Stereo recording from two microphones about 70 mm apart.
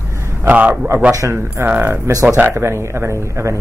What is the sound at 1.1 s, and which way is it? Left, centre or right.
Speech, right.